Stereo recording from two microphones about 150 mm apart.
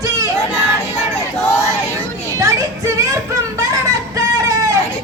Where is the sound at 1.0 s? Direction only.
45° left (ahead or behind).